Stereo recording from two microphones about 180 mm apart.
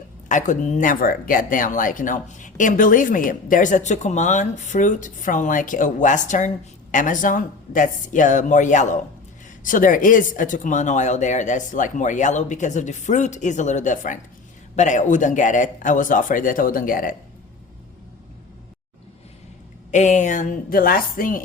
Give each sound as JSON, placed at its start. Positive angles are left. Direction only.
{"t": 0.3, "sound": "speech", "side_deg": 45}
{"t": 19.9, "sound": "speech", "side_deg": 40}